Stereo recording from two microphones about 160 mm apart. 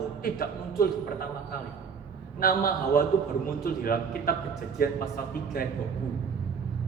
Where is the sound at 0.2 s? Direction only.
65° left (ahead or behind).